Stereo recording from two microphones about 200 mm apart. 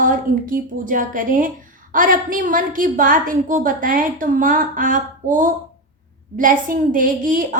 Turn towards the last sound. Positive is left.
turn(degrees=-45)  # may be behind; listen again after turning